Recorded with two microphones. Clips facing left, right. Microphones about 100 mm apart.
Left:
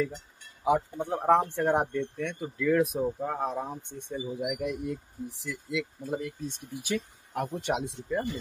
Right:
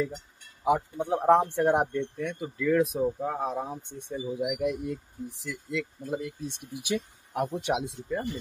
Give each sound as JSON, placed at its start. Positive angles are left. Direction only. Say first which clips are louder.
{"t": 0.7, "sound": "speech", "louder": "right 1 dB", "side_deg": 0}
{"t": 6.7, "sound": "speech", "louder": "right 2 dB", "side_deg": -15}